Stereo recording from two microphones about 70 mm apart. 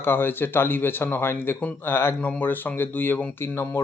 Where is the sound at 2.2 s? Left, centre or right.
Left.